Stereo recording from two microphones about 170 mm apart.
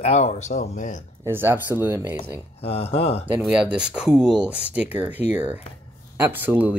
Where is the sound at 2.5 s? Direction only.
35° left (ahead or behind).